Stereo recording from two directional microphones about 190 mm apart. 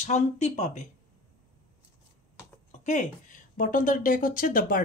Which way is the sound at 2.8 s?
40° left (ahead or behind).